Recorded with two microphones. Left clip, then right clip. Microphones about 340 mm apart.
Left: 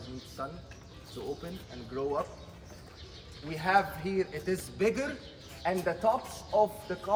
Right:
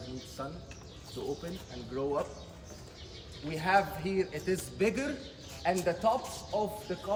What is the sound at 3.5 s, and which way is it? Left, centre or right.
A man's voice, centre.